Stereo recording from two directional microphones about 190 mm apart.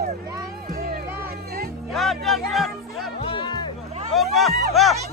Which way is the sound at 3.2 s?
25° left (ahead or behind).